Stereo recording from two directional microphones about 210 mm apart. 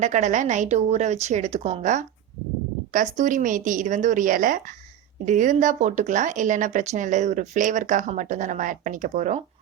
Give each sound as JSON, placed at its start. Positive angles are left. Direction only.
{"t": 0.0, "sound": "speech", "side_deg": -35}